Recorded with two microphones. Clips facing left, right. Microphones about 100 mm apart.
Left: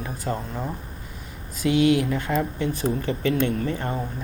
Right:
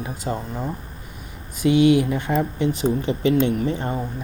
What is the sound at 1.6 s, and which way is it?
Speech, 20° right (ahead or behind).